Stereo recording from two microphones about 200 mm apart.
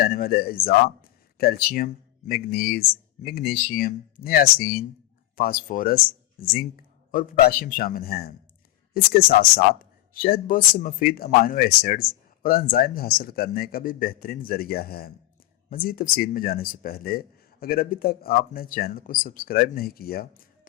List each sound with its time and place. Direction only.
0.0 s a man's voice: 50° left (ahead or behind)
7.1 s a man's voice: 45° left (ahead or behind)